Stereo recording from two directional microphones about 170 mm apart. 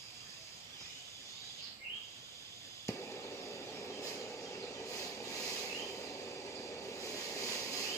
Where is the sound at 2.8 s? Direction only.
15° left (ahead or behind).